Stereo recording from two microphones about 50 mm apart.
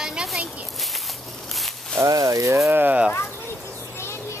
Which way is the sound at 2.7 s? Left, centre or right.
Right.